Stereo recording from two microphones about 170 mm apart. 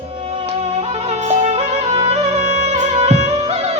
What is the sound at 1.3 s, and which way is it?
Music, 40° right (ahead or behind).